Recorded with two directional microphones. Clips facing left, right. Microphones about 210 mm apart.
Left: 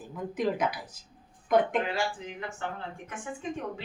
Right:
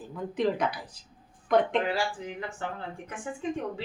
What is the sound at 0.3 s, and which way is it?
Speech, 5° left (ahead or behind).